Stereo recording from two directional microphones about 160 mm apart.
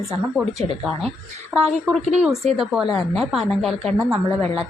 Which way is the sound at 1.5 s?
10° right (ahead or behind).